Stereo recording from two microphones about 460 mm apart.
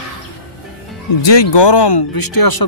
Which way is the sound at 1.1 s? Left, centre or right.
Left.